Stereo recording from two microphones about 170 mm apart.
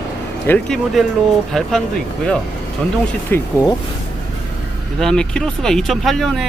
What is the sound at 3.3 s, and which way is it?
Speech, 15° left (ahead or behind).